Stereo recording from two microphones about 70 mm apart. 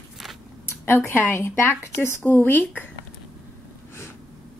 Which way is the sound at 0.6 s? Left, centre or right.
Left.